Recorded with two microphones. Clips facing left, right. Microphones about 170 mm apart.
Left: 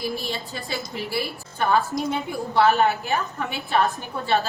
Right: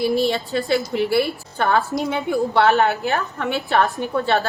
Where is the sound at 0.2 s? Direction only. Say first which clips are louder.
Right 11 dB; 70° right (ahead or behind).